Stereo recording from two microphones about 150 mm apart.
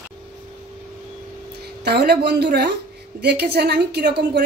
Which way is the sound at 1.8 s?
90° right.